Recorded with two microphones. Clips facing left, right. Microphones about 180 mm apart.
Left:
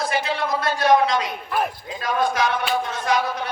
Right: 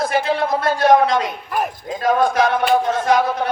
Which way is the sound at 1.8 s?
50° right (ahead or behind).